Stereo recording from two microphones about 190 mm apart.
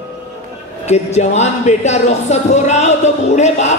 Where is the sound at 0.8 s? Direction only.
35° left (ahead or behind).